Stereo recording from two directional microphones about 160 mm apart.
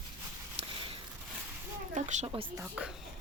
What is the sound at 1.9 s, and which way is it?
Speech, 50° right (ahead or behind).